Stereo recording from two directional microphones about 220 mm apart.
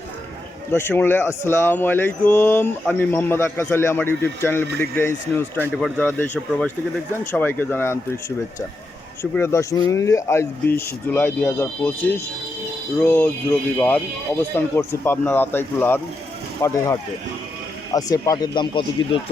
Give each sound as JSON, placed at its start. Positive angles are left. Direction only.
{"t": 0.7, "sound": "speech", "side_deg": 10}
{"t": 9.3, "sound": "speech", "side_deg": 10}
{"t": 13.0, "sound": "speech", "side_deg": 10}